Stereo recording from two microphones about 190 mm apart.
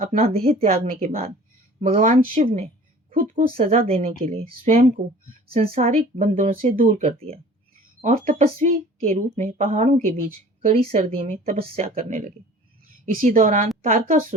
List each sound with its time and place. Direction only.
0.0 s speech: 35° right (ahead or behind)
3.1 s speech: 50° right (ahead or behind)